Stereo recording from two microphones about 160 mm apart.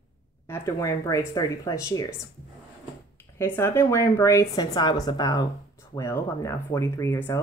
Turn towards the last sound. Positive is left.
turn(degrees=15)  # may be behind; listen again after turning